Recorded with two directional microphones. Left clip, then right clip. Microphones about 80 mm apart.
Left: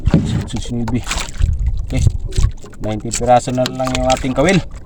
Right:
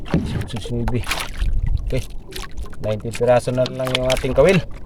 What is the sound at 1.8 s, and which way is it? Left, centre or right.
Pour, left.